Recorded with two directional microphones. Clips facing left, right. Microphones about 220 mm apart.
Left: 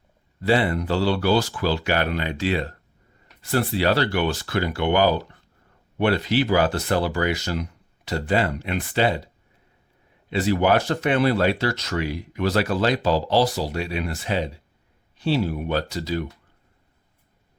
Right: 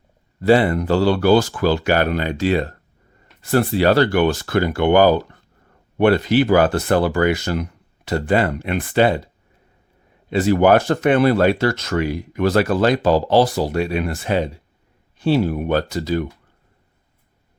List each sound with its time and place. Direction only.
0.4 s speech: 45° right (ahead or behind)